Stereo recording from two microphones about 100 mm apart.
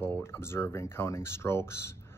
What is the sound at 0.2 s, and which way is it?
Speech, 25° left (ahead or behind).